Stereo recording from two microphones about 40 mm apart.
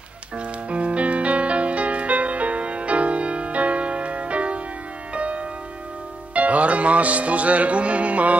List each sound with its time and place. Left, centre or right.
0.4 s music: right